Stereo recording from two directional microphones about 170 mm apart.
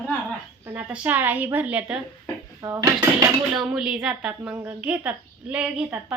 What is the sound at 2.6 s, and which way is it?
Dishes, 20° right (ahead or behind).